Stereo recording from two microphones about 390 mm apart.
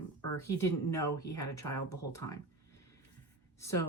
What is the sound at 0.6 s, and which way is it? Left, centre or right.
Speech, centre.